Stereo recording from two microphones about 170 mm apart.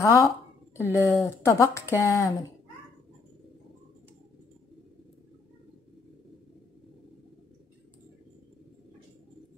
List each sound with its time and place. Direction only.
0.0 s speech: 20° left (ahead or behind)